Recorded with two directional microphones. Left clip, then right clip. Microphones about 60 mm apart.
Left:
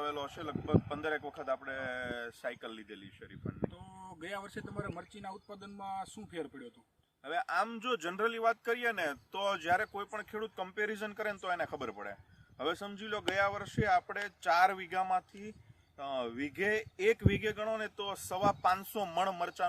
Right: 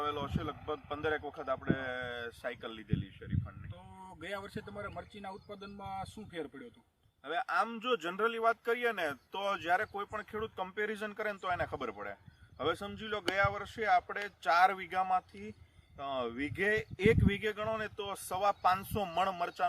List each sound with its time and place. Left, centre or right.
0.0 s a man's voice: left
0.4 s a man's voice: centre; by 2.5 s left
2.5 s a man's voice: centre
4.4 s speech: right
7.3 s a man's voice: left